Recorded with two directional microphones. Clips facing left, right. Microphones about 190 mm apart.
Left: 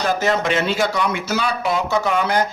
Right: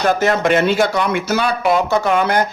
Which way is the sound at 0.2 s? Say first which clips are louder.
Right 4 dB; 55° right (ahead or behind).